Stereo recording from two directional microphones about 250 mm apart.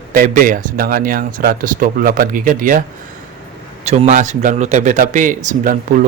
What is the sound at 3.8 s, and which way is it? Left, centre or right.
Speech, right.